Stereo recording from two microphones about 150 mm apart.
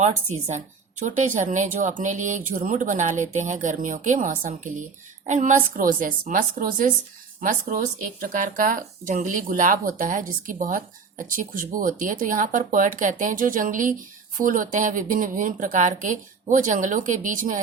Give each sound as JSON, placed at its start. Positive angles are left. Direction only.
{"t": 0.5, "sound": "speech", "side_deg": -55}